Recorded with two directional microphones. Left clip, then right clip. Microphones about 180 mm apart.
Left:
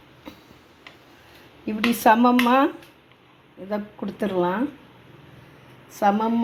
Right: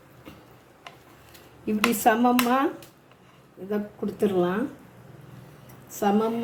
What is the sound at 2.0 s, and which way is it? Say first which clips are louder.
Speech: left 5 dB; 20° left (ahead or behind).